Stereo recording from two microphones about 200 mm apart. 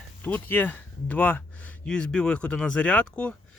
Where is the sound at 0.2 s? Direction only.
10° left (ahead or behind).